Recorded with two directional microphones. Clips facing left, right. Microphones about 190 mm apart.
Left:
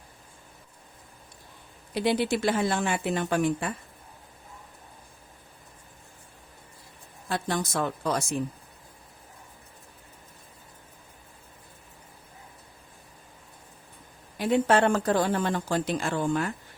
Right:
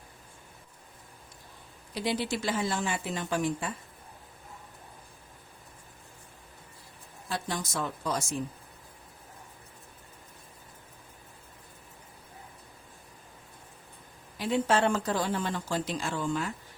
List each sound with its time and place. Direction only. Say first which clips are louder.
1.9 s speech: left 6 dB; 60° left (ahead or behind)
7.3 s speech: left 5 dB; 60° left (ahead or behind)
14.3 s speech: left 4 dB; 55° left (ahead or behind)